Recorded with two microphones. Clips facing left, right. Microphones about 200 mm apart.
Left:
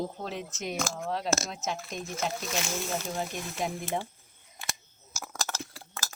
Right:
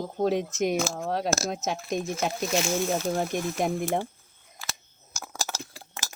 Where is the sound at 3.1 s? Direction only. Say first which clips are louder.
Right 7 dB; 55° right (ahead or behind).